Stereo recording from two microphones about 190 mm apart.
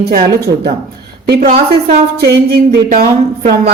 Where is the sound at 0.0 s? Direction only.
55° right (ahead or behind).